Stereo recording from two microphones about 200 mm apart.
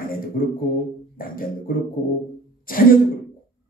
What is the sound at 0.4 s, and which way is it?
Speech, 45° left (ahead or behind).